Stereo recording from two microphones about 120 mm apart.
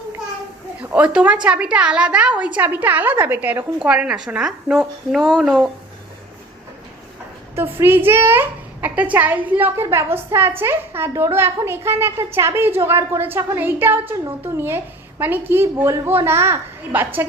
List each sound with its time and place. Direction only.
0.8 s a woman's voice: 10° right (ahead or behind)
7.5 s a woman's voice: 20° right (ahead or behind)